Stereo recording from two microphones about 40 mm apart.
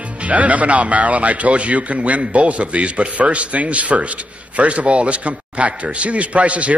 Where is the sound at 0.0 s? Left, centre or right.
Right.